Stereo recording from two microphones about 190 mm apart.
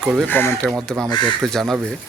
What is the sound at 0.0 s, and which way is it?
Speech, centre (ahead or behind).